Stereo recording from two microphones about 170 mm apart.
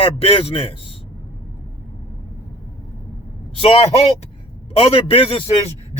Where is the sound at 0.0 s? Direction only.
35° left (ahead or behind).